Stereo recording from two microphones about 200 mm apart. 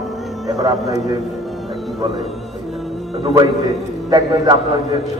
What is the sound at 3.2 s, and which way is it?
Speech, 30° right (ahead or behind).